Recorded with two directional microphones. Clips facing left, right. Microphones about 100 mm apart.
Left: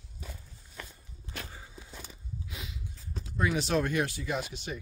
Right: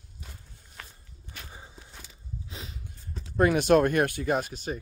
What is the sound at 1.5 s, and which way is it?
Walk, 20° right (ahead or behind).